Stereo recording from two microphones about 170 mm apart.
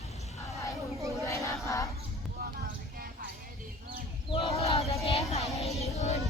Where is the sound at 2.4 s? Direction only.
60° right (ahead or behind).